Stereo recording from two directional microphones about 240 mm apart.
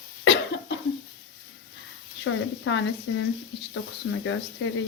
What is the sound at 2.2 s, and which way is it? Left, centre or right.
Speech, left.